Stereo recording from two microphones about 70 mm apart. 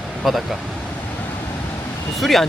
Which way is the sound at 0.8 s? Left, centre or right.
Left.